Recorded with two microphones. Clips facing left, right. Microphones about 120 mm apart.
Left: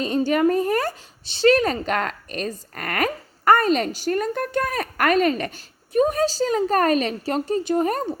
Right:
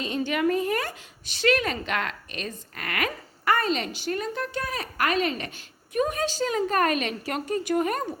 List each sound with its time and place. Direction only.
0.0 s speech: 40° left (ahead or behind)